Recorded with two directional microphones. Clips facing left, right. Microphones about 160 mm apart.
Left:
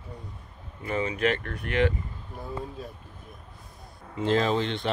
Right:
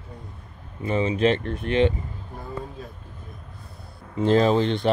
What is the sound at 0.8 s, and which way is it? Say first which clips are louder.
Speech: right 5 dB; 25° right (ahead or behind).